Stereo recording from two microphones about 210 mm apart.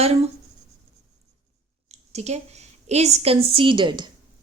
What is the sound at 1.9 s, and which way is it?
A woman's voice, 30° right (ahead or behind).